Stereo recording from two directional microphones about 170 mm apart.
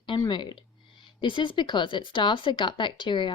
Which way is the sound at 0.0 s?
25° left (ahead or behind).